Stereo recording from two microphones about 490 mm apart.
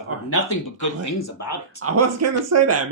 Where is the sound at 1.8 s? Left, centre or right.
Right.